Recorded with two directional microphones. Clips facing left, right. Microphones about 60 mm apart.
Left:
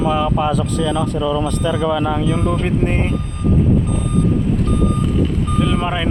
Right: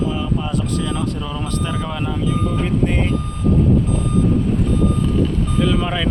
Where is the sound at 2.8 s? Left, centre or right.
Left.